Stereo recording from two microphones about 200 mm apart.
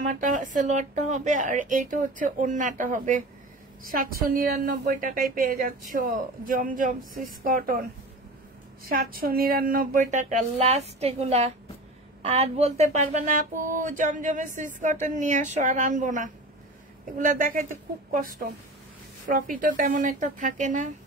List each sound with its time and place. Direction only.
0.1 s speech: 40° right (ahead or behind)
8.8 s speech: 45° right (ahead or behind)